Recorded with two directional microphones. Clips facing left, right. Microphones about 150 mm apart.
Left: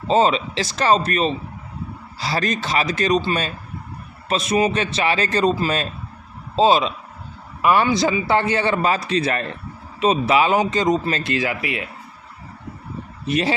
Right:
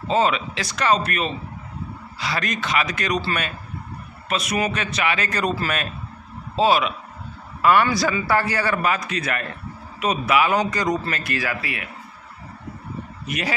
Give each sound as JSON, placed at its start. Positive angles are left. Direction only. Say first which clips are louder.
{"t": 0.1, "sound": "a man's voice", "louder": "left 3 dB", "side_deg": 30}
{"t": 4.3, "sound": "a man's voice", "louder": "left 5 dB", "side_deg": 30}
{"t": 13.2, "sound": "a man's voice", "louder": "left 7 dB", "side_deg": 30}